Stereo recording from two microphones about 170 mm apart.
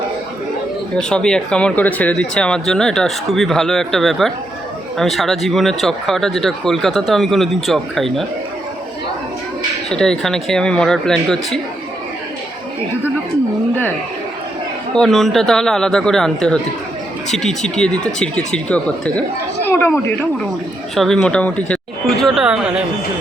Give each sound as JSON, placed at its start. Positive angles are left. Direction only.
{"t": 0.9, "sound": "speech", "side_deg": 5}
{"t": 9.9, "sound": "speech", "side_deg": 5}
{"t": 14.9, "sound": "speech", "side_deg": 0}
{"t": 20.9, "sound": "speech", "side_deg": 0}